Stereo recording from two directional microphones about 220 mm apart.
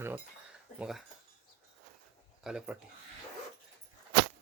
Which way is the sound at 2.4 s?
5° right (ahead or behind).